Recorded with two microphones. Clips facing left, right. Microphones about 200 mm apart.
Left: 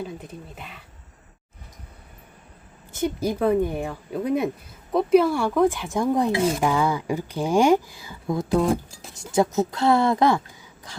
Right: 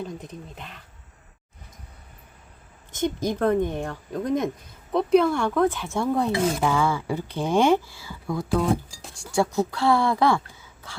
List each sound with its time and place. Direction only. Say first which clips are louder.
0.0 s speech: even; 5° left (ahead or behind)
2.9 s speech: left 1 dB; 10° left (ahead or behind)
8.6 s speech: left 1 dB; centre (ahead or behind)
9.2 s a woman's voice: left 2 dB; 20° left (ahead or behind)